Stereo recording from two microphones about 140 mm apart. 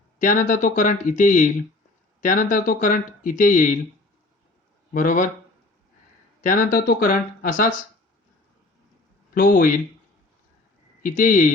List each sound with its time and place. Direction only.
0.2 s speech: 65° left (ahead or behind)
4.9 s speech: 65° left (ahead or behind)
6.4 s speech: 75° left (ahead or behind)
9.3 s speech: 90° left
11.0 s speech: 70° left (ahead or behind)